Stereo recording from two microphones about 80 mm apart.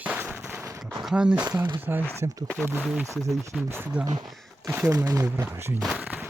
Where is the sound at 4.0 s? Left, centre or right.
Centre.